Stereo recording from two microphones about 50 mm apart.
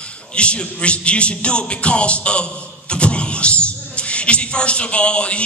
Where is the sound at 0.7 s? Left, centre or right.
Left.